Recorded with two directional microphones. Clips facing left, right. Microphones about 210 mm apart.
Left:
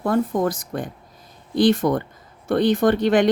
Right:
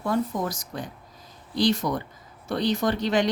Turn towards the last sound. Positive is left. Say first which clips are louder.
# left 7 dB
turn(degrees=55)  # may be behind; listen again after turning